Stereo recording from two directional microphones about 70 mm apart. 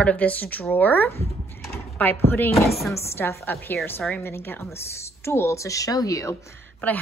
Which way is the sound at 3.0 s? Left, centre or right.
Left.